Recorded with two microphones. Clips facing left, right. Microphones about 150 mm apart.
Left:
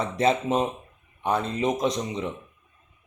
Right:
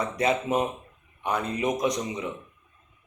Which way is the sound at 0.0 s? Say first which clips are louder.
Left 2 dB; 25° left (ahead or behind).